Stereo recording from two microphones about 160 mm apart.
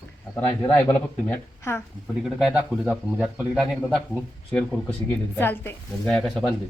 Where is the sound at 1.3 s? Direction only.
15° left (ahead or behind).